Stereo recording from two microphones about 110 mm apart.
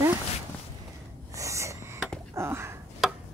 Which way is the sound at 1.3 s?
30° right (ahead or behind).